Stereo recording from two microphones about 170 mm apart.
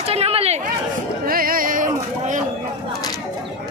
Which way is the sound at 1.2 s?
60° right (ahead or behind).